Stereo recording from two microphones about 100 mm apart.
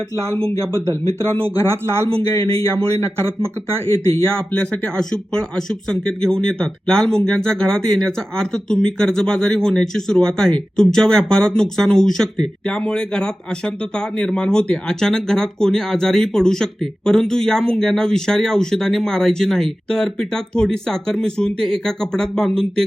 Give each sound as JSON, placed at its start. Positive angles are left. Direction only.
{"t": 1.6, "sound": "speech", "side_deg": -25}
{"t": 2.5, "sound": "speech", "side_deg": -70}
{"t": 3.8, "sound": "speech", "side_deg": 30}
{"t": 4.3, "sound": "speech", "side_deg": 10}